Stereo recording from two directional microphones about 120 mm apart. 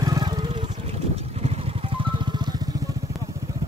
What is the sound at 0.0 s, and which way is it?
Vehicle, 35° right (ahead or behind).